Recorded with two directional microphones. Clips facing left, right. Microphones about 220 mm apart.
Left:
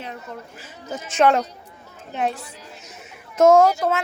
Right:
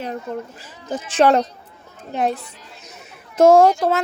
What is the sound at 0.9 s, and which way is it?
A woman's voice, 35° right (ahead or behind).